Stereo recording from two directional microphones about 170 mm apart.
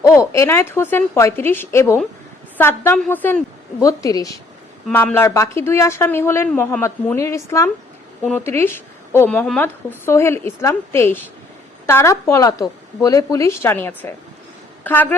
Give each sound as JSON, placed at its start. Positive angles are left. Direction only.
{"t": 0.0, "sound": "a woman's voice", "side_deg": 15}